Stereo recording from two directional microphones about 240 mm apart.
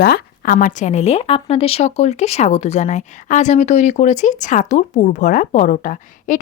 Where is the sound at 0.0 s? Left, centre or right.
Left.